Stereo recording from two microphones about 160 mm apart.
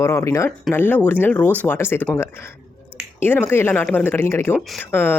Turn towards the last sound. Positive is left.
turn(degrees=15)  # may be behind; listen again after turning